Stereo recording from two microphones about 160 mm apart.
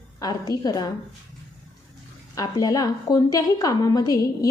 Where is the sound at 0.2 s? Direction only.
25° left (ahead or behind).